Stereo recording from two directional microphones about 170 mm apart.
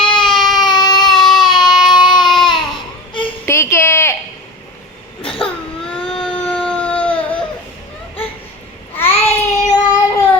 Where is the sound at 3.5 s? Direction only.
15° left (ahead or behind).